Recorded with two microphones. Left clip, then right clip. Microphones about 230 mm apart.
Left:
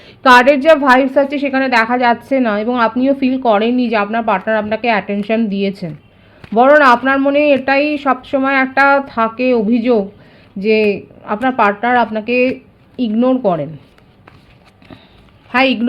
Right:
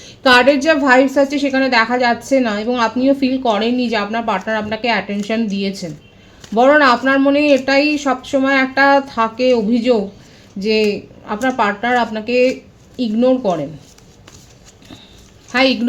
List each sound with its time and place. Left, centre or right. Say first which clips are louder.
0.0 s a woman's voice: left 3 dB; left
15.5 s a woman's voice: left 1 dB; left